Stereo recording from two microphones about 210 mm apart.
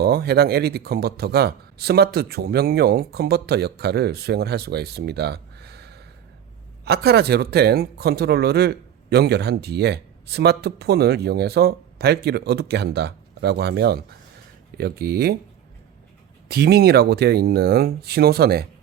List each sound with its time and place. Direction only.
0.0 s speech: 50° right (ahead or behind)
16.5 s speech: 50° right (ahead or behind)